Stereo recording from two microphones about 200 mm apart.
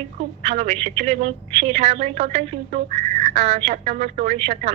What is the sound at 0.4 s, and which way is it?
A woman's voice, 30° right (ahead or behind).